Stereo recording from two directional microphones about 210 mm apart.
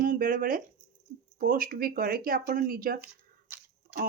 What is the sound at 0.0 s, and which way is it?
A woman's voice, 40° right (ahead or behind).